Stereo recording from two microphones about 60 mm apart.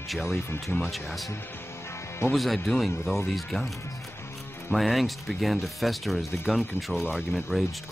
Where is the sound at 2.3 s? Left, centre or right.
Centre.